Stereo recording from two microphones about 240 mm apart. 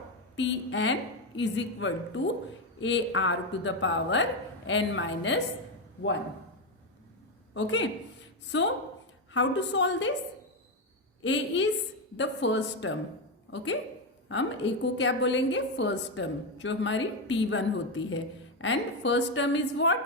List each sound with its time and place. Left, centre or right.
0.3 s a woman's voice: left
7.5 s a woman's voice: left
11.2 s a woman's voice: left